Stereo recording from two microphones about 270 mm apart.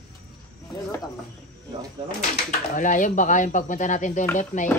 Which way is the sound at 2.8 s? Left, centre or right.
Left.